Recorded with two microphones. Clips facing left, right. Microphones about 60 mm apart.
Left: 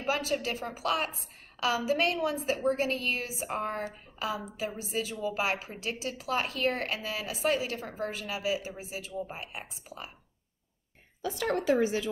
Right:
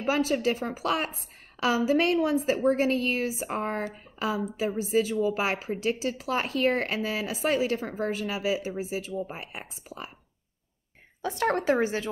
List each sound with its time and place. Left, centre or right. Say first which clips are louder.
0.0 s a woman's voice: right 5 dB; right
11.2 s speech: right 3 dB; right